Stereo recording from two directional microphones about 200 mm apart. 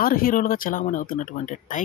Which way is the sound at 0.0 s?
45° left (ahead or behind).